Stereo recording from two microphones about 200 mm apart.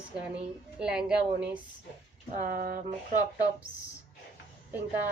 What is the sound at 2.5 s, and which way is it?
Speech, 50° right (ahead or behind).